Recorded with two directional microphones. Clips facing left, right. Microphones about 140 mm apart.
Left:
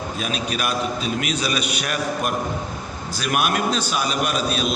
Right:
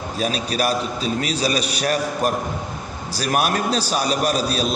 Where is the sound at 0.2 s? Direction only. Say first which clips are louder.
Right 5 dB; 35° right (ahead or behind).